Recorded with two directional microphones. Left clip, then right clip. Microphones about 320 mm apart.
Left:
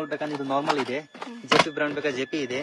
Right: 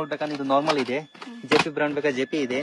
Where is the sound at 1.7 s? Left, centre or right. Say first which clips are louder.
Right 2 dB; right.